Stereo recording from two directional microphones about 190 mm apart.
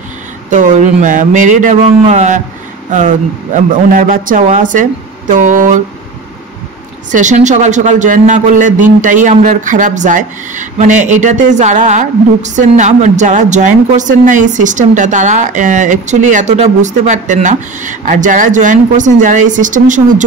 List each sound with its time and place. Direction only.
0.5 s a man's voice: 40° right (ahead or behind)
7.1 s a man's voice: 40° right (ahead or behind)